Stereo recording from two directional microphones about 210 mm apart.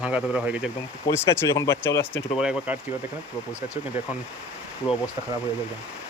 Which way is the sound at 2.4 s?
5° right (ahead or behind).